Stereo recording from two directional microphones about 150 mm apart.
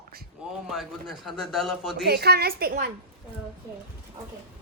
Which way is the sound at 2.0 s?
90° right.